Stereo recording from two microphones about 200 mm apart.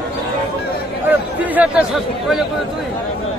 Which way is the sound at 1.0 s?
5° right (ahead or behind).